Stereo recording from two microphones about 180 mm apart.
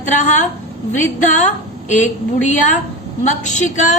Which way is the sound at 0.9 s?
40° left (ahead or behind).